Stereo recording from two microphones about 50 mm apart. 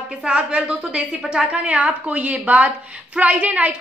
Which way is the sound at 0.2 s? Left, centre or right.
Centre.